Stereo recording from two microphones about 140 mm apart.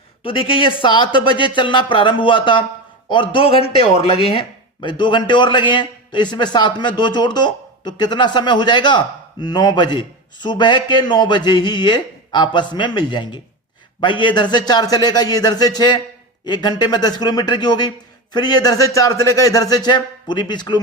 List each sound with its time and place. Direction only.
0.2 s speech: 40° left (ahead or behind)